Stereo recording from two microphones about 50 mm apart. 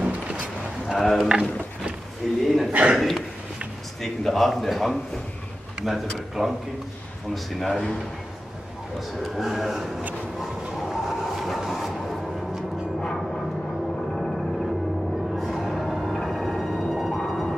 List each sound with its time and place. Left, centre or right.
0.0 s a sound: right
0.9 s speech: centre
1.3 s speech: right
2.4 s speech: centre
2.7 s speech: right
4.0 s a man's voice: centre
9.2 s speech: centre
10.4 s train: centre
13.0 s a sound: centre
14.1 s music: centre
17.2 s whale vocalization: centre